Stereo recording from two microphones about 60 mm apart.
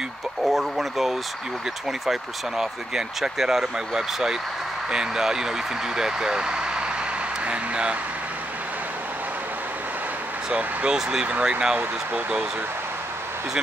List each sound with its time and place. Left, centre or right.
0.5 s speech: centre
7.4 s a sound: centre
10.5 s speech: right
11.0 s speech: centre
11.2 s speech: right